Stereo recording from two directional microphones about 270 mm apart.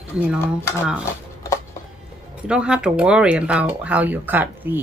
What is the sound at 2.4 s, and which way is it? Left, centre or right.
Speech, centre.